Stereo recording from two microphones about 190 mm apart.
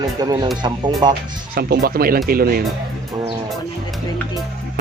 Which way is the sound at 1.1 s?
55° right (ahead or behind).